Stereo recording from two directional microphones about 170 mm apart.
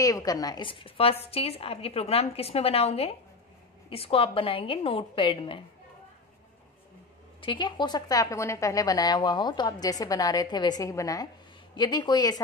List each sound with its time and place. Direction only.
0.0 s a woman's voice: 20° left (ahead or behind)
7.4 s a woman's voice: 30° left (ahead or behind)